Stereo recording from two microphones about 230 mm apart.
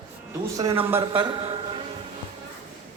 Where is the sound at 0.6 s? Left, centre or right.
Centre.